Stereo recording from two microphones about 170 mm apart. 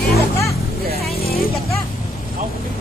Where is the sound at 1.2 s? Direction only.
60° left (ahead or behind).